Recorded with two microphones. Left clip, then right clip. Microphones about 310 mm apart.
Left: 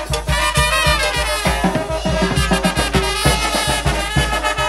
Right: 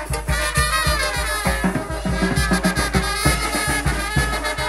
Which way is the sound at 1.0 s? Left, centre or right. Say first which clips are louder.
Left 4 dB; centre.